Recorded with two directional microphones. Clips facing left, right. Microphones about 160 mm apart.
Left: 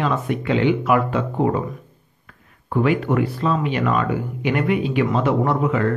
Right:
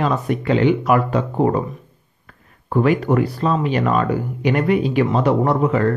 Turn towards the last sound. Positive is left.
turn(degrees=-40)  # may be behind; listen again after turning